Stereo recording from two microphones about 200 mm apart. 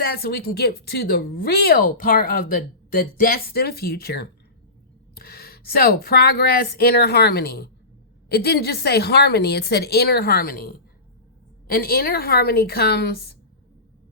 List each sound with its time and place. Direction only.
0.0 s a woman's voice: 50° left (ahead or behind)